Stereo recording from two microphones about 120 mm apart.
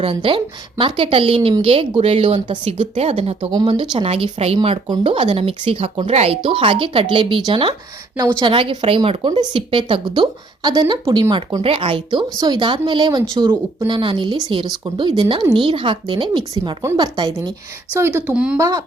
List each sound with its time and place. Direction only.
0.0 s speech: 45° right (ahead or behind)
3.5 s speech: 40° right (ahead or behind)
12.4 s speech: 40° right (ahead or behind)
17.9 s speech: 15° right (ahead or behind)
18.5 s speech: 30° right (ahead or behind)